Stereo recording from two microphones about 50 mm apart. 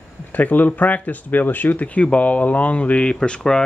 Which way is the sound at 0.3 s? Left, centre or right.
Left.